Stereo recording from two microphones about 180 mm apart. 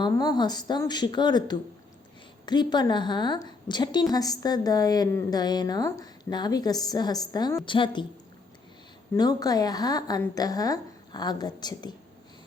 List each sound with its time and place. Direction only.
0.0 s a woman's voice: 25° left (ahead or behind)
9.1 s a woman's voice: 20° left (ahead or behind)